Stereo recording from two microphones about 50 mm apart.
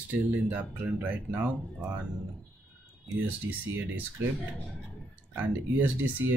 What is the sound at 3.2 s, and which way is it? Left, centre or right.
Speech, right.